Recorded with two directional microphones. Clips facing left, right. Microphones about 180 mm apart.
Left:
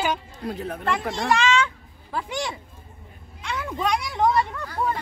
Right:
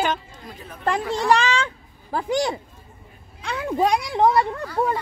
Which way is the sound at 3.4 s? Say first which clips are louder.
Right 5 dB; 35° right (ahead or behind).